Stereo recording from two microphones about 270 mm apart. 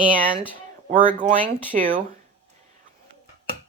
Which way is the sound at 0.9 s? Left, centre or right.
Right.